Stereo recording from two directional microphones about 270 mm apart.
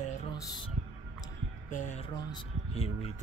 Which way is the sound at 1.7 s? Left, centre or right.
Left.